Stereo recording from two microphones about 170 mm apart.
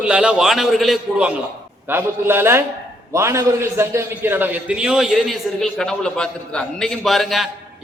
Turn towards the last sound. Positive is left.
turn(degrees=0)  # may be behind; listen again after turning